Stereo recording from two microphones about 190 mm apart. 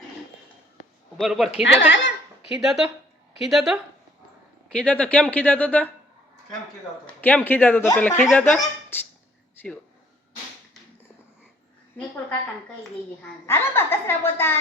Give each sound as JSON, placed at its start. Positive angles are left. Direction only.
{"t": 1.1, "sound": "a man's voice", "side_deg": 0}
{"t": 1.6, "sound": "speech", "side_deg": 80}
{"t": 2.6, "sound": "a man's voice", "side_deg": 0}
{"t": 7.2, "sound": "speech", "side_deg": 10}
{"t": 11.9, "sound": "speech", "side_deg": 10}
{"t": 13.5, "sound": "speech", "side_deg": 10}